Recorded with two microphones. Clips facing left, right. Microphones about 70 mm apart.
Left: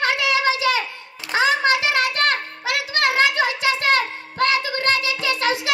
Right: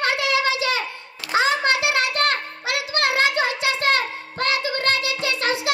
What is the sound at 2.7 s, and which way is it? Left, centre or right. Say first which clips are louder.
Music: left 2 dB; left.